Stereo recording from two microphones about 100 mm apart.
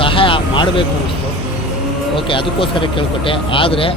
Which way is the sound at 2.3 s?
55° left (ahead or behind).